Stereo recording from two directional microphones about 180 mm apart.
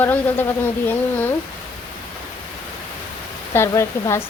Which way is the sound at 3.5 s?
15° left (ahead or behind).